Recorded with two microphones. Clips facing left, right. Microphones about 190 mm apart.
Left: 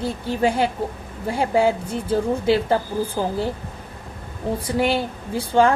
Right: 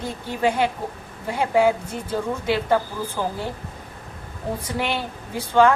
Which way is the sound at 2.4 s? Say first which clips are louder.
Even; 30° left (ahead or behind).